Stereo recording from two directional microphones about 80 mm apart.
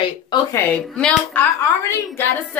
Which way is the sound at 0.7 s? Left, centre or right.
Centre.